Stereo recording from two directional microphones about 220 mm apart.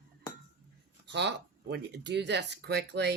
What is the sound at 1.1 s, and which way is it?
Speech, 50° right (ahead or behind).